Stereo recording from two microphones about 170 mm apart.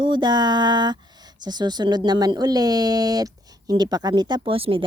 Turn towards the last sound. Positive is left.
turn(degrees=-30)  # may be behind; listen again after turning